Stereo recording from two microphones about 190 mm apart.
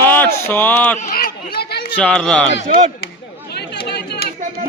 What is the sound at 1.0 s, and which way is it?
Speech, 50° left (ahead or behind).